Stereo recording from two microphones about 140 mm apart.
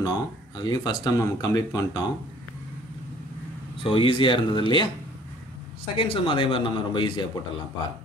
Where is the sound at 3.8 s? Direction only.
40° left (ahead or behind).